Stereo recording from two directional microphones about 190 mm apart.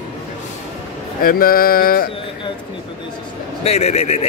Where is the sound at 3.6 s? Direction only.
35° left (ahead or behind).